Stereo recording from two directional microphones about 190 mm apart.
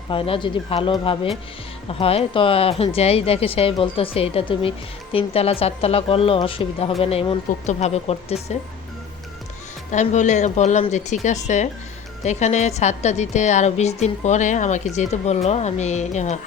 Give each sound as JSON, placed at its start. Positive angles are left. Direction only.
{"t": 0.1, "sound": "a woman's voice", "side_deg": 25}
{"t": 9.9, "sound": "a woman's voice", "side_deg": 40}